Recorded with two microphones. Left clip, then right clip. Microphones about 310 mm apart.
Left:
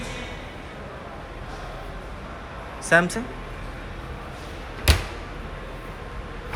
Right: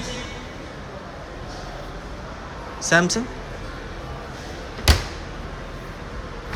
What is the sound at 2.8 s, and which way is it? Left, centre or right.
Speech, centre.